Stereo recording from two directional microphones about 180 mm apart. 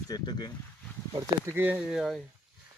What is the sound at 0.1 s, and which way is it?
Speech, 25° left (ahead or behind).